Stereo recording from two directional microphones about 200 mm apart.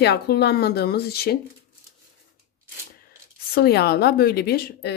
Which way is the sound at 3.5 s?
50° left (ahead or behind).